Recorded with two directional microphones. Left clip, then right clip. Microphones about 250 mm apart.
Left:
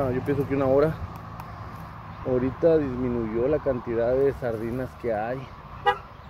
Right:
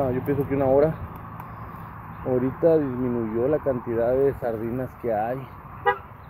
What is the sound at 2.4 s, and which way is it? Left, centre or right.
Speech, centre.